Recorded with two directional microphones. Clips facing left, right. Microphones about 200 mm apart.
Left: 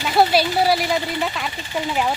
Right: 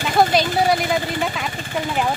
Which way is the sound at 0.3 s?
5° left (ahead or behind).